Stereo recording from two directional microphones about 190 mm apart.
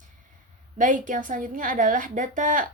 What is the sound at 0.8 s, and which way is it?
Speech, 45° right (ahead or behind).